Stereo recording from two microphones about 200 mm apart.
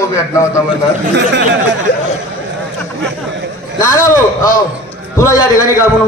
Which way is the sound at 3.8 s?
15° left (ahead or behind).